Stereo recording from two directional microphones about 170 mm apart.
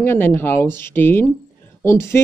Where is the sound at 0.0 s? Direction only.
10° left (ahead or behind).